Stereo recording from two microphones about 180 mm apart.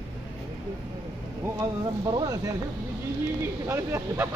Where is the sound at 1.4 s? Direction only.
20° right (ahead or behind).